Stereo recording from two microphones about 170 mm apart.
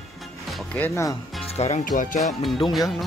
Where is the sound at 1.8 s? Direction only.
45° left (ahead or behind).